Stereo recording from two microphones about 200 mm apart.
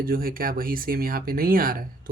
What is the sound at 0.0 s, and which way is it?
Speech, 45° right (ahead or behind).